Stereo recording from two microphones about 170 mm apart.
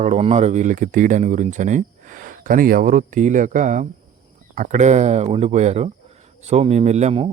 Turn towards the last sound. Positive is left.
turn(degrees=-40)  # may be behind; listen again after turning